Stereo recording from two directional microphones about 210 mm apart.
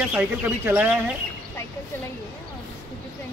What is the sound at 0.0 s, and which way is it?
Speech, 5° right (ahead or behind).